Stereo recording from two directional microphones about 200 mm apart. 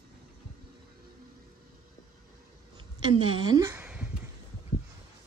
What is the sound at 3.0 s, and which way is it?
Speech, 25° right (ahead or behind).